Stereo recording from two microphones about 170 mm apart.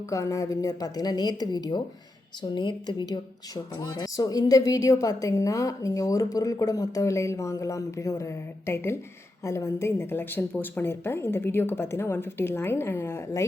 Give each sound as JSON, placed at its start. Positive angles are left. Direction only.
{"t": 0.1, "sound": "a woman's voice", "side_deg": 20}